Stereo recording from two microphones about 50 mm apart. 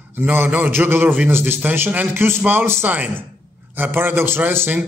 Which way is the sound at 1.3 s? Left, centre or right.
Right.